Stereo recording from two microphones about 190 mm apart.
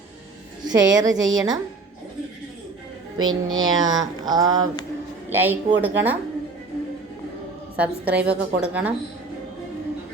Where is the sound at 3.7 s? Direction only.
20° right (ahead or behind).